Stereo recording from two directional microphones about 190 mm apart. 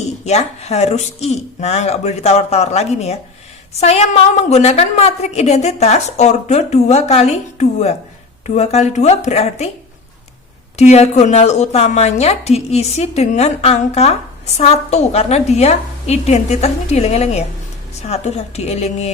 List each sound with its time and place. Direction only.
0.3 s a woman's voice: 35° left (ahead or behind)
10.8 s a woman's voice: 35° left (ahead or behind)